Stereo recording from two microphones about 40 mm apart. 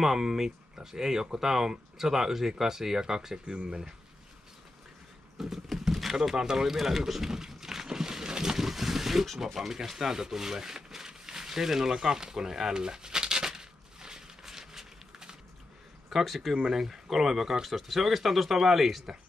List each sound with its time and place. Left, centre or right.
0.0 s speech: centre
5.4 s a sound: centre
16.1 s speech: centre